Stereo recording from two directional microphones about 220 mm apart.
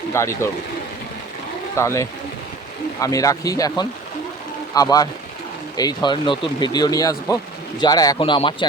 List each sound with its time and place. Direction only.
0.1 s speech: 10° left (ahead or behind)
1.7 s speech: 15° left (ahead or behind)